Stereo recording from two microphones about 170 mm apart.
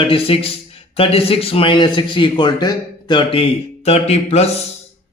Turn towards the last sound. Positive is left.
turn(degrees=40)  # may be behind; listen again after turning